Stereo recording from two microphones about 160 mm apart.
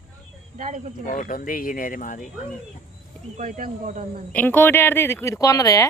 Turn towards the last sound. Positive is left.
turn(degrees=20)  # may be behind; listen again after turning